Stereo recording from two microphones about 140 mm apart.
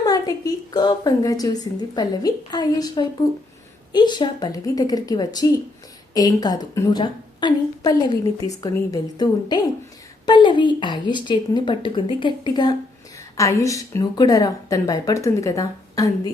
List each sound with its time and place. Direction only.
0.0 s a woman's voice: 25° left (ahead or behind)